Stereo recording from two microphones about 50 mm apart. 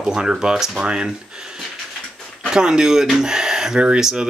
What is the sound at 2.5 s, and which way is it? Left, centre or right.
Speech, centre.